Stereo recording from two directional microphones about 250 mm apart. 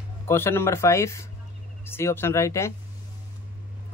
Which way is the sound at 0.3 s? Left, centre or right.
Centre.